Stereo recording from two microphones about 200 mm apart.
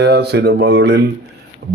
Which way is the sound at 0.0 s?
55° right (ahead or behind).